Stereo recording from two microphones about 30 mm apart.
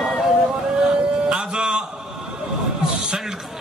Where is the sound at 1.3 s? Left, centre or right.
Right.